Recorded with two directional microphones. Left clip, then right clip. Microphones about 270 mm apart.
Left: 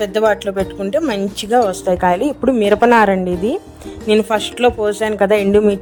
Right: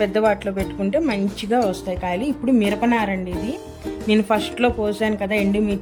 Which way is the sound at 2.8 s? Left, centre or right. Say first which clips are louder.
Left 10 dB; left.